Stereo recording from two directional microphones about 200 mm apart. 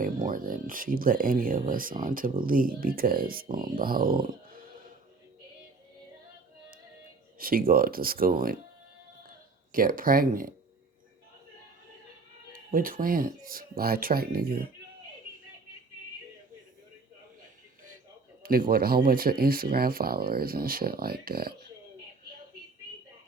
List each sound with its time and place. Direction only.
0.0 s speech: 45° right (ahead or behind)
7.3 s speech: 45° right (ahead or behind)
9.7 s speech: 45° right (ahead or behind)
12.5 s speech: 45° right (ahead or behind)
18.4 s speech: 45° right (ahead or behind)